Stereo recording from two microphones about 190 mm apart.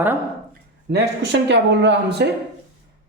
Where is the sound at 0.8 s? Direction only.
60° right (ahead or behind).